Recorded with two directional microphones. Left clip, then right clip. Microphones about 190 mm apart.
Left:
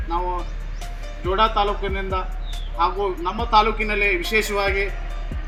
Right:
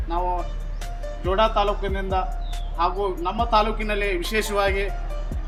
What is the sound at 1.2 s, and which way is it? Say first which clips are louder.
A man's voice: left 1 dB; 20° right (ahead or behind).